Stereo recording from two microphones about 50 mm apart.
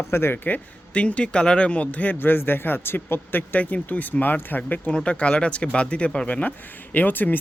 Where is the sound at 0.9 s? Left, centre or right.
Left.